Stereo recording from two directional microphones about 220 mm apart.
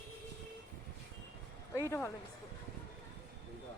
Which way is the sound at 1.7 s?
10° left (ahead or behind).